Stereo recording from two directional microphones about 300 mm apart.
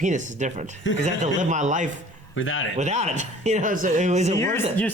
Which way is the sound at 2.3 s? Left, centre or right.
Left.